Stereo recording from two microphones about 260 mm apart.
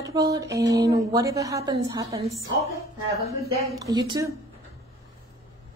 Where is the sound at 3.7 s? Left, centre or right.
Centre.